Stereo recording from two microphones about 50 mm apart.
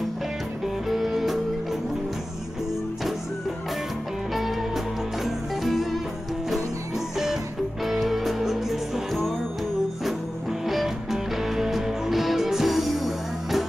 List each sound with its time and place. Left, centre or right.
0.8 s music: centre
4.3 s music: centre
7.8 s music: centre
10.6 s music: centre